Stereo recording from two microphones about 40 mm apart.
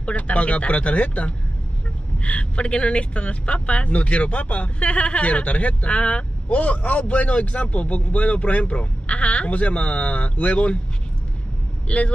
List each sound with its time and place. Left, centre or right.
0.0 s speech: left
11.9 s speech: left